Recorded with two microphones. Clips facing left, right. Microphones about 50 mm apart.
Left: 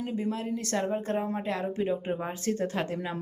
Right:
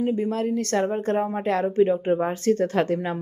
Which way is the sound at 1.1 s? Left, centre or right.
Right.